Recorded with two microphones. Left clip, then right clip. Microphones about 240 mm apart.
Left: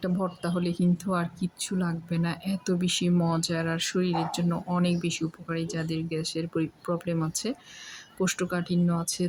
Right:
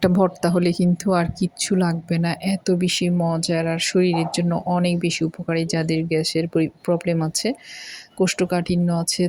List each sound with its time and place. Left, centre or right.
0.0 s speech: right